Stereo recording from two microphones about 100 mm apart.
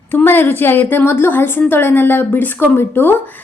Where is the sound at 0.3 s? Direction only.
20° left (ahead or behind).